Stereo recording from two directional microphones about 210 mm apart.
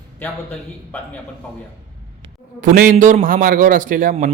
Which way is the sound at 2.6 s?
40° right (ahead or behind).